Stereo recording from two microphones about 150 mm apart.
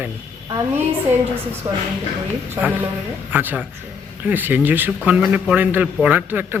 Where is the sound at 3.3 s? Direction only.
10° right (ahead or behind).